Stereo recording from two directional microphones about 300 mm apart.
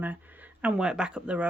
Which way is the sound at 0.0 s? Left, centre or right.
Centre.